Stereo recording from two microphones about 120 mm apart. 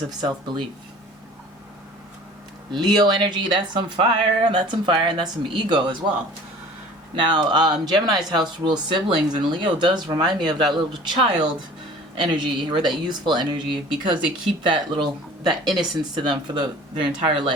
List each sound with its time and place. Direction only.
0.2 s speech: 40° right (ahead or behind)
2.8 s speech: 40° right (ahead or behind)
7.2 s speech: 40° right (ahead or behind)